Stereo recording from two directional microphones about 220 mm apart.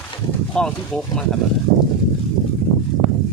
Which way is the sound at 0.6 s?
5° left (ahead or behind).